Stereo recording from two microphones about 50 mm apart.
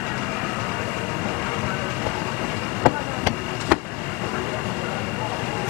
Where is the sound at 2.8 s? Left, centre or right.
Right.